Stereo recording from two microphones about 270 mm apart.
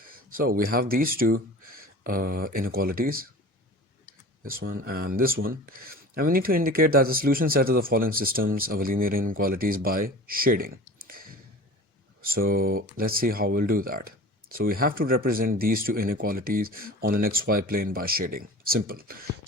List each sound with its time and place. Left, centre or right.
0.0 s speech: right
4.7 s speech: right
11.0 s a sound: right
12.2 s speech: right